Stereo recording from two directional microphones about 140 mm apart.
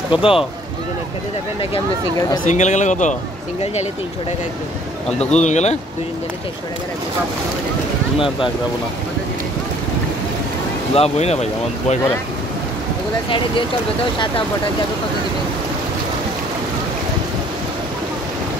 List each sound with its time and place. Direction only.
0.1 s speech: 40° left (ahead or behind)
2.4 s speech: 55° left (ahead or behind)
5.3 s speech: 55° left (ahead or behind)
11.0 s speech: 50° left (ahead or behind)